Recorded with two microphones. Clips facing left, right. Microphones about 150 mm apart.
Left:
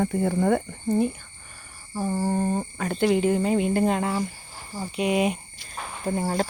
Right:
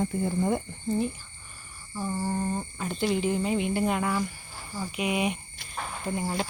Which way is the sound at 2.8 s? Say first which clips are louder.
Left 6 dB; 70° left (ahead or behind).